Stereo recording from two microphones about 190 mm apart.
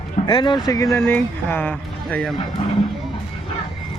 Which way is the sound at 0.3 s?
25° left (ahead or behind).